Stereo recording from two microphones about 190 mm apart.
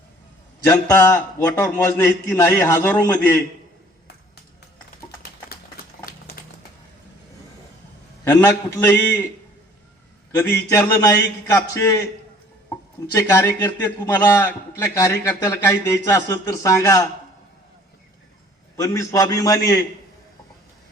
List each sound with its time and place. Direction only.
0.7 s a man's voice: 15° left (ahead or behind)
8.2 s a man's voice: 15° left (ahead or behind)
10.7 s a man's voice: 15° left (ahead or behind)
13.1 s a man's voice: 15° left (ahead or behind)
18.8 s a man's voice: 15° left (ahead or behind)